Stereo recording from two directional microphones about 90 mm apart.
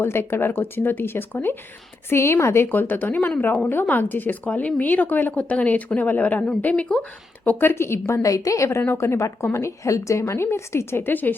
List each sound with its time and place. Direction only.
0.0 s a woman's voice: 25° left (ahead or behind); by 7.0 s 10° left (ahead or behind)
7.4 s a woman's voice: 25° left (ahead or behind)